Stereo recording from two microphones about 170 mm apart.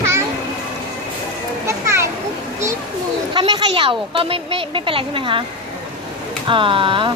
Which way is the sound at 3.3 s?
25° right (ahead or behind).